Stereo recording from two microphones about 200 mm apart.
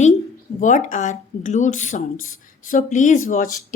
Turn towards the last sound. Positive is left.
turn(degrees=40)  # may be behind; listen again after turning